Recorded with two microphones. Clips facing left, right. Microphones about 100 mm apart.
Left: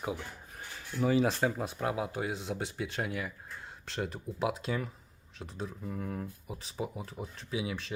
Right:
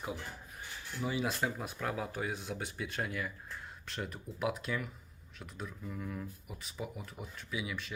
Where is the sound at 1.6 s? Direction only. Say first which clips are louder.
Left 4 dB; 25° left (ahead or behind); by 6.2 s 45° left (ahead or behind).